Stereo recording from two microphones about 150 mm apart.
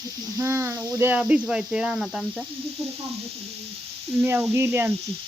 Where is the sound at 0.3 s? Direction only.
15° right (ahead or behind).